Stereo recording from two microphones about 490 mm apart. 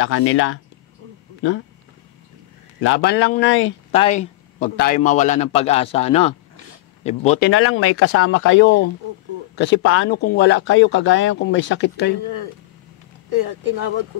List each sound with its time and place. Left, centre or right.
0.0 s speech: left
2.8 s speech: left
3.9 s a man's voice: centre
13.3 s speech: right